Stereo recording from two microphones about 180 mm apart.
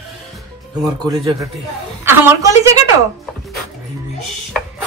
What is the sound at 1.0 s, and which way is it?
A woman's voice, 20° right (ahead or behind).